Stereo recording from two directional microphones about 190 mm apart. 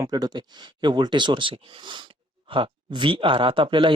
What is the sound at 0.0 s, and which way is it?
Speech, 20° right (ahead or behind).